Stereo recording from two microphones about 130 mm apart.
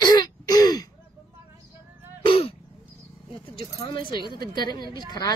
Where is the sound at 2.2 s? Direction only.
45° left (ahead or behind).